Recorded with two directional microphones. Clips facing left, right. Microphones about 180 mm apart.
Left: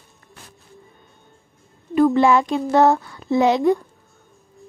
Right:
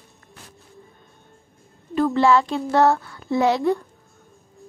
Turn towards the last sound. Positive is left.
turn(degrees=20)  # may be behind; listen again after turning